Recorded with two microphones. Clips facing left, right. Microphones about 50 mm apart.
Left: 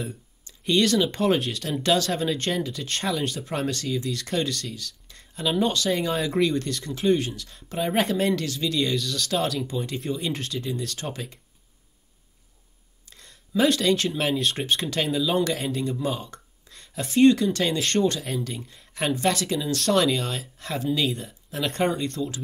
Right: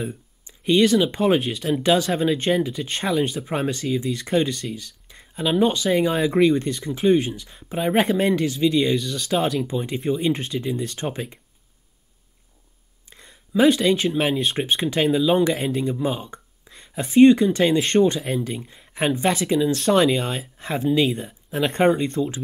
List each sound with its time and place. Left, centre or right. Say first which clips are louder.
0.0 s speech: right 4 dB; centre
6.4 s speech: right 6 dB; centre
13.1 s speech: right 3 dB; centre